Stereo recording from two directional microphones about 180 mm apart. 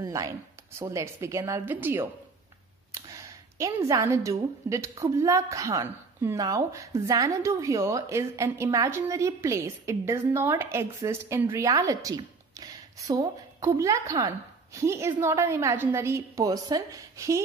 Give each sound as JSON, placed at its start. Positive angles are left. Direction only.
{"t": 0.0, "sound": "a woman's voice", "side_deg": -20}
{"t": 3.5, "sound": "a woman's voice", "side_deg": -15}